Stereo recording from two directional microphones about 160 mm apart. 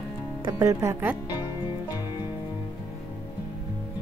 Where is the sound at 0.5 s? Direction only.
20° right (ahead or behind).